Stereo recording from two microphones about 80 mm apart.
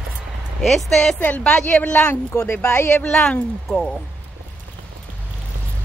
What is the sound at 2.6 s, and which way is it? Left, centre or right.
Speech, left.